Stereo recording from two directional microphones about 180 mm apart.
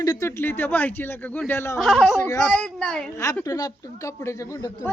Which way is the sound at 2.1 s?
20° left (ahead or behind).